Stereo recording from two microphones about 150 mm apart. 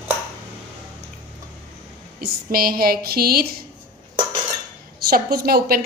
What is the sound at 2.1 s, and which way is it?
A woman's voice, 80° right.